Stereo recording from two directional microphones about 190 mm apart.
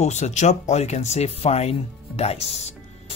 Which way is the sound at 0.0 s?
35° left (ahead or behind).